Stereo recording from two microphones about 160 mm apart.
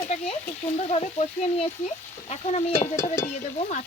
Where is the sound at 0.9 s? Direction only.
40° left (ahead or behind).